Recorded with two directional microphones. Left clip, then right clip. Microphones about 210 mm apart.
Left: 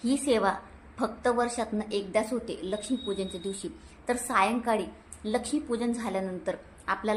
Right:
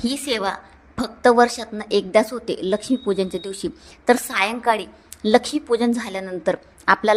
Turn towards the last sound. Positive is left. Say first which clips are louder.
# right 13 dB
turn(degrees=-45)  # may be behind; listen again after turning